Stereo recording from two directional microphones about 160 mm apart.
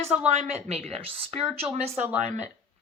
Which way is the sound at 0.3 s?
45° right (ahead or behind).